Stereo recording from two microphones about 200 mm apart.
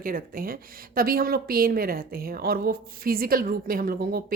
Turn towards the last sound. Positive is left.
turn(degrees=-45)  # may be behind; listen again after turning